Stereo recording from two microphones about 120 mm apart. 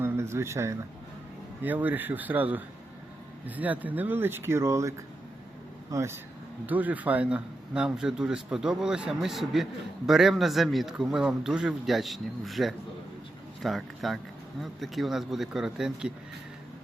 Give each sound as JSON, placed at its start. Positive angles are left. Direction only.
{"t": 0.0, "sound": "speech", "side_deg": -20}